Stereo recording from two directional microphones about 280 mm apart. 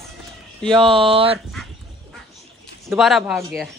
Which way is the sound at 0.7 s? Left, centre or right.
Centre.